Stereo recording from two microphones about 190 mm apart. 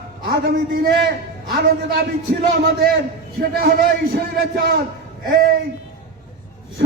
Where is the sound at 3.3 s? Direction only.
50° right (ahead or behind).